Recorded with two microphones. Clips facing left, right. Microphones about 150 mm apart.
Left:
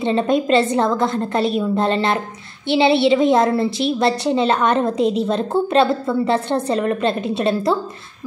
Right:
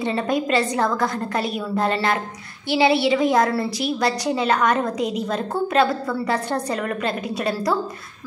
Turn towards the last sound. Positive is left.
turn(degrees=25)  # may be behind; listen again after turning